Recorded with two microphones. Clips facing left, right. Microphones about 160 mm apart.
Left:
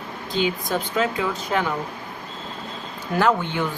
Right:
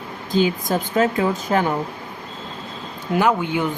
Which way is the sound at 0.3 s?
45° right (ahead or behind).